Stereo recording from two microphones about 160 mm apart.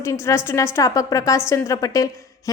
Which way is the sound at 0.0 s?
20° left (ahead or behind).